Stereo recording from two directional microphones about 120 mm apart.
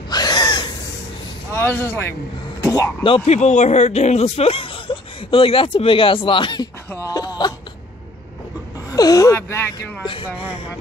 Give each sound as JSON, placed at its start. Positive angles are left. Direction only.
{"t": 0.1, "sound": "gasp", "side_deg": 35}
{"t": 1.5, "sound": "speech", "side_deg": 20}
{"t": 2.6, "sound": "a sound", "side_deg": 30}
{"t": 3.3, "sound": "speech", "side_deg": 70}
{"t": 6.9, "sound": "a sound", "side_deg": 25}
{"t": 8.9, "sound": "speech", "side_deg": 30}
{"t": 10.0, "sound": "speech", "side_deg": 40}